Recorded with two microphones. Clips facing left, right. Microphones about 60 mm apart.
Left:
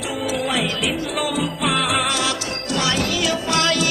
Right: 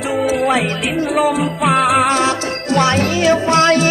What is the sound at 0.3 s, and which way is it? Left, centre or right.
Music, right.